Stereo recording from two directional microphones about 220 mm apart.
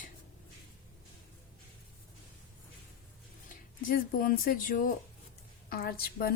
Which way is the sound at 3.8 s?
40° left (ahead or behind).